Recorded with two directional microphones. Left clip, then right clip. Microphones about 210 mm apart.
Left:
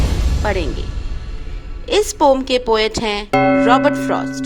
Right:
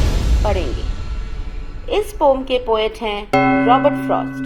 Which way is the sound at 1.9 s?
60° left (ahead or behind).